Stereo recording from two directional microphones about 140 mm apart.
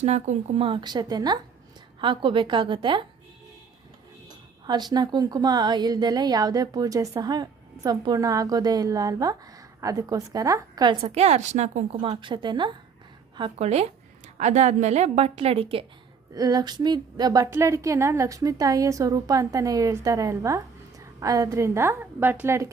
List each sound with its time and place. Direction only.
0.0 s a woman's voice: 50° right (ahead or behind); by 3.1 s 35° right (ahead or behind)
4.6 s speech: 30° right (ahead or behind)
11.0 s a woman's voice: 50° right (ahead or behind)
12.2 s a woman's voice: 35° right (ahead or behind)
13.6 s a woman's voice: 50° right (ahead or behind)
16.3 s speech: 25° right (ahead or behind)